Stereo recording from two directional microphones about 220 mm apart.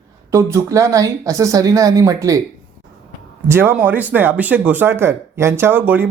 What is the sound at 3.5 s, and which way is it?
Speech, 10° right (ahead or behind).